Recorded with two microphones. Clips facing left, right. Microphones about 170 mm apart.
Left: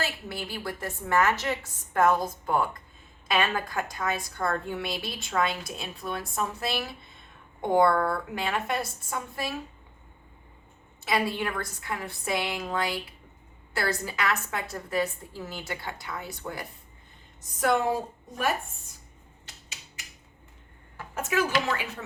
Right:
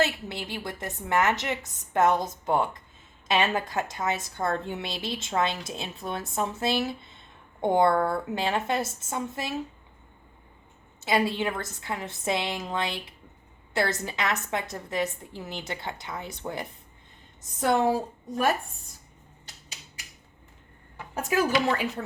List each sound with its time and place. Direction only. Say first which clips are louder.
0.0 s a woman's voice: right 6 dB; 20° right (ahead or behind)
11.0 s a woman's voice: right 2 dB; 25° right (ahead or behind)
14.0 s a woman's voice: even; 20° right (ahead or behind)
21.2 s speech: right 2 dB; 35° right (ahead or behind)